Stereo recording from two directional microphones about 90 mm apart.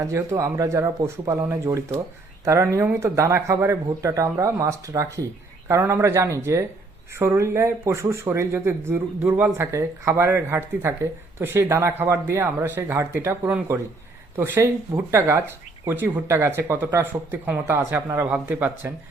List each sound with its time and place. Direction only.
0.0 s speech: 35° right (ahead or behind)
16.0 s speech: 20° right (ahead or behind)
16.2 s speech: 35° right (ahead or behind)